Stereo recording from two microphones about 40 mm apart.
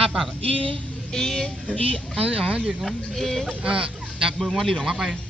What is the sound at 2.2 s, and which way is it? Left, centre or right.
Speech, right.